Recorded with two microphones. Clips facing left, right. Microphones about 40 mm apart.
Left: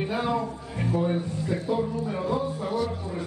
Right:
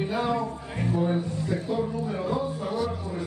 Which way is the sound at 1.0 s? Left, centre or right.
Centre.